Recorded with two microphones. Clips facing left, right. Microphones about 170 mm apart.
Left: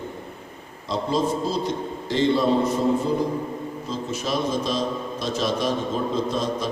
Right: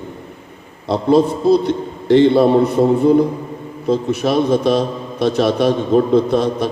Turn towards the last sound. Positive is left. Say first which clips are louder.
# right 8 dB
turn(degrees=-65)  # may be behind; listen again after turning